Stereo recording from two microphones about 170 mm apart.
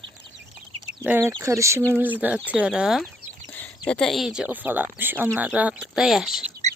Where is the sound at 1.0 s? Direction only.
10° right (ahead or behind).